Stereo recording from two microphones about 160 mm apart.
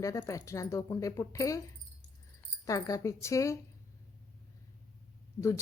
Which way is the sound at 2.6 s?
20° left (ahead or behind).